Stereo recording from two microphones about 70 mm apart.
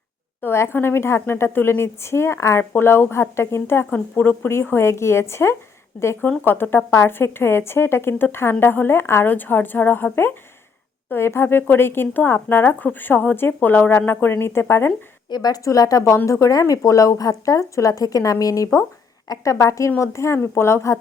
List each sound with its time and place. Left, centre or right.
0.4 s speech: left
9.3 s a woman's voice: left
15.3 s a woman's voice: left